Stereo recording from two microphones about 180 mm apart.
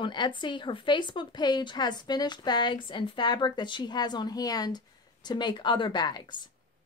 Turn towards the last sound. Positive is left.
turn(degrees=25)  # may be behind; listen again after turning